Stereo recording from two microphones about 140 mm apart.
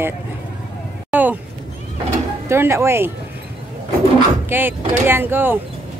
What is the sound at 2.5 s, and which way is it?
Speech, 20° right (ahead or behind).